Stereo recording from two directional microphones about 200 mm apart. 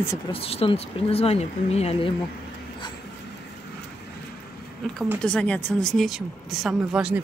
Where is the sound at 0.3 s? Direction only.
30° left (ahead or behind).